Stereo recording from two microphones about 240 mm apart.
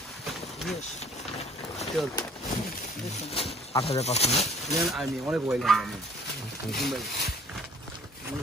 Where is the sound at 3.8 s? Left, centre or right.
Left.